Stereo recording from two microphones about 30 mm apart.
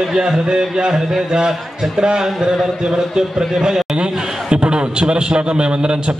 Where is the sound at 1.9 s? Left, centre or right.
Right.